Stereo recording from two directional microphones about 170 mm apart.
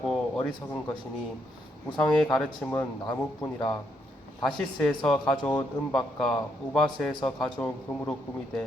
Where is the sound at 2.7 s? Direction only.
15° left (ahead or behind).